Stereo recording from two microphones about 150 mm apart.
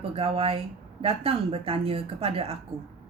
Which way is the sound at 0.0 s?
40° right (ahead or behind).